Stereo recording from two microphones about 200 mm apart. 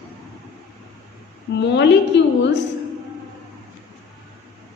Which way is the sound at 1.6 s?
60° left (ahead or behind).